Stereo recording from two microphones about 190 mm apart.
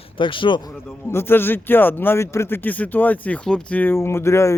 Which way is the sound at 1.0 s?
10° left (ahead or behind).